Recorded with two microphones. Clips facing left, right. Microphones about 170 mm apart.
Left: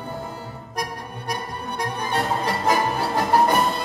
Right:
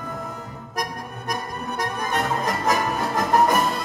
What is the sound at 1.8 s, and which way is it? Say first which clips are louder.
Music: even; 30° left (ahead or behind).